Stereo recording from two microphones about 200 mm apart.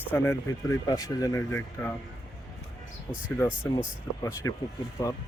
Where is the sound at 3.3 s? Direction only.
10° left (ahead or behind).